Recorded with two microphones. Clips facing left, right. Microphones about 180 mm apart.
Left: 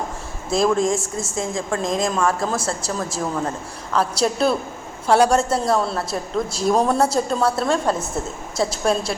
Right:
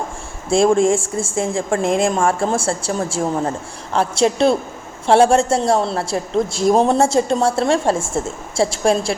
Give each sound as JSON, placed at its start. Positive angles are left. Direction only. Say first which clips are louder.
{"t": 0.5, "sound": "a woman's voice", "louder": "right 5 dB", "side_deg": -30}